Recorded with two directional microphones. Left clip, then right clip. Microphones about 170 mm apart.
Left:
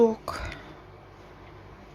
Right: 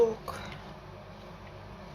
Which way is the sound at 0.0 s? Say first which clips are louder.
Left 4 dB; 70° left (ahead or behind).